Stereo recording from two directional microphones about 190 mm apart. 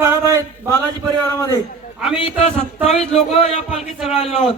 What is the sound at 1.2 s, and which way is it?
Speech, 15° left (ahead or behind).